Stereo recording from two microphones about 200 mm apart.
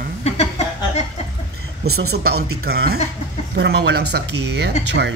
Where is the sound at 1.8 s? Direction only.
55° right (ahead or behind).